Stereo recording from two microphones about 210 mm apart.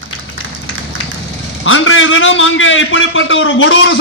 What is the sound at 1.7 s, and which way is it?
A man's voice, 70° left (ahead or behind).